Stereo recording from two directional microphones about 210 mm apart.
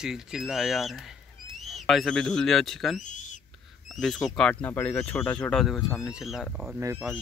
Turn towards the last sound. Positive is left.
turn(degrees=-10)  # may be behind; listen again after turning